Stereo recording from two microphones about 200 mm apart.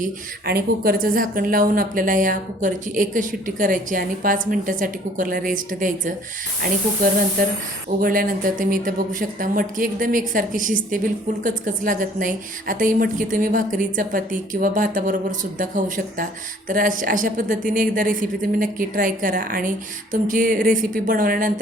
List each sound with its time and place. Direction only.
0.0 s speech: 50° right (ahead or behind)